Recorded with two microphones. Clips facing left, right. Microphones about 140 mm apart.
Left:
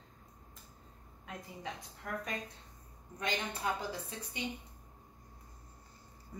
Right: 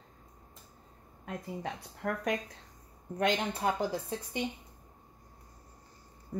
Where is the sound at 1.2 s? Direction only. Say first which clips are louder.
Right 6 dB; 50° right (ahead or behind).